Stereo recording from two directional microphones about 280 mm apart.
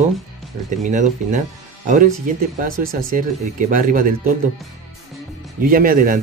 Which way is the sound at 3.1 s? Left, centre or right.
Right.